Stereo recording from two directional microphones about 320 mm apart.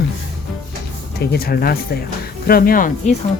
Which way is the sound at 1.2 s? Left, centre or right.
Left.